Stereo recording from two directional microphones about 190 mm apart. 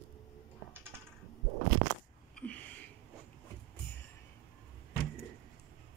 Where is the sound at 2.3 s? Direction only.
5° left (ahead or behind).